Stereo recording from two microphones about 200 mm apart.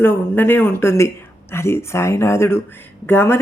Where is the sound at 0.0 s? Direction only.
10° left (ahead or behind).